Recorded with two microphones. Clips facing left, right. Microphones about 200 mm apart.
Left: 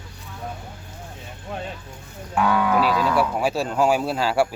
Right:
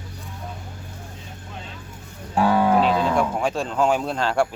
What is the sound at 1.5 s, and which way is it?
Vehicle, 60° left (ahead or behind).